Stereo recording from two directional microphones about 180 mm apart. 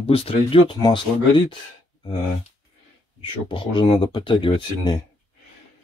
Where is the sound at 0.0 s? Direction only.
30° left (ahead or behind).